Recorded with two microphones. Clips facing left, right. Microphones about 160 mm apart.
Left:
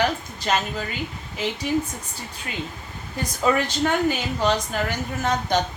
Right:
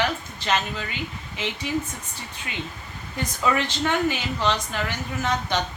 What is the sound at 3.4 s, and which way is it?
A woman's voice, 40° left (ahead or behind).